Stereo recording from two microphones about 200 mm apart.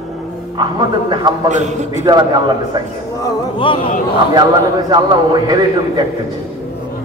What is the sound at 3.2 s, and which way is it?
Speech, 25° left (ahead or behind).